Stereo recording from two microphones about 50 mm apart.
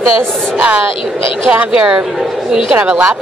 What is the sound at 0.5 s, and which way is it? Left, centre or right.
Speech, right.